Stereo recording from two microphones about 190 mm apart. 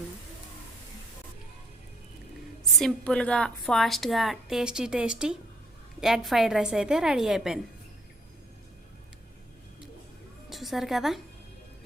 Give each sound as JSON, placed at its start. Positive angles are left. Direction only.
{"t": 2.7, "sound": "a woman's voice", "side_deg": 5}
{"t": 10.5, "sound": "a woman's voice", "side_deg": 0}